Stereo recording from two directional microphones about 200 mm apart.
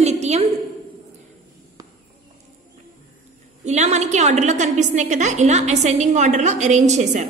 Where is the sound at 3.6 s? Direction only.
35° right (ahead or behind).